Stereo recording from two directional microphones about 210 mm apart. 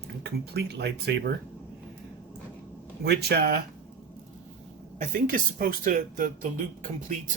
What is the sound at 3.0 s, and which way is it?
Speech, 50° right (ahead or behind).